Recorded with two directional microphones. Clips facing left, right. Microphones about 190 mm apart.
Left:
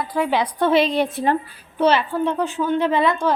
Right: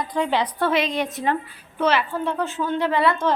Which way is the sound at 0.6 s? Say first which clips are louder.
Left 8 dB; 30° left (ahead or behind).